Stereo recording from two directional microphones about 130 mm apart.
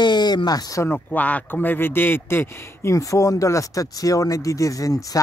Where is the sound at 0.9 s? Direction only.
10° left (ahead or behind).